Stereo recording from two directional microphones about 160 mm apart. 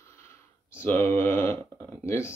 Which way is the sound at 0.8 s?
10° left (ahead or behind).